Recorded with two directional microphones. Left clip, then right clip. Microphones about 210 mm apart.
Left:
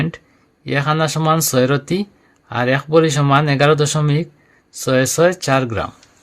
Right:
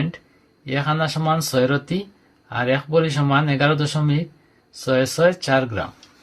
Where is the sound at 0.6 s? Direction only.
50° left (ahead or behind).